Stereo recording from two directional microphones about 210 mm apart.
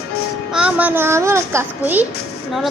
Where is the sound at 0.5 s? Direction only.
5° right (ahead or behind).